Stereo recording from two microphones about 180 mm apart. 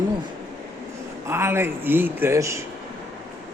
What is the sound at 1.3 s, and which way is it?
A man's voice, 15° right (ahead or behind).